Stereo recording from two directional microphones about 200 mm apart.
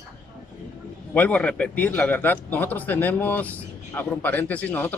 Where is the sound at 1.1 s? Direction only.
5° left (ahead or behind).